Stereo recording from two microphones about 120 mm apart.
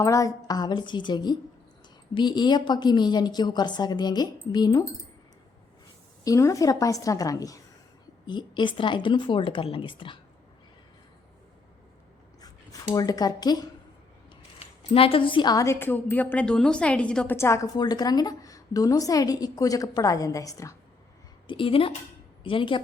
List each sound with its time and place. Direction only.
0.0 s a woman's voice: 25° left (ahead or behind)
6.2 s a woman's voice: 25° left (ahead or behind)
8.3 s speech: 40° left (ahead or behind)
12.9 s a woman's voice: 30° left (ahead or behind)
14.9 s speech: 50° left (ahead or behind)
15.5 s a woman's voice: 25° left (ahead or behind)
17.3 s a woman's voice: 25° left (ahead or behind)
21.4 s speech: 45° left (ahead or behind)